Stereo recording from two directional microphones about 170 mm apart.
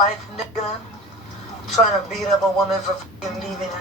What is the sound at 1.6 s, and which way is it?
Speech, centre (ahead or behind).